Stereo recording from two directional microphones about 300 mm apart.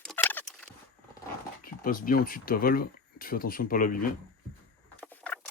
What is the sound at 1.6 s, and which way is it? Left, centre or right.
Speech, left.